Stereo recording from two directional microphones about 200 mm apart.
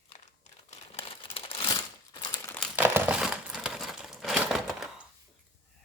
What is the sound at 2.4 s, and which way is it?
Crumpling, 10° left (ahead or behind).